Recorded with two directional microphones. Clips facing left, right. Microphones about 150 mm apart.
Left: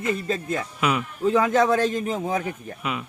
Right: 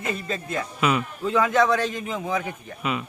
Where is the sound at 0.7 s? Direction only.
5° left (ahead or behind).